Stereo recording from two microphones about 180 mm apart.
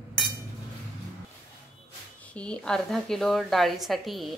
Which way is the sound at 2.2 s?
5° left (ahead or behind).